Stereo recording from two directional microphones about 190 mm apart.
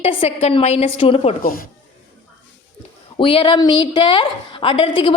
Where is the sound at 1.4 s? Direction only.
50° left (ahead or behind).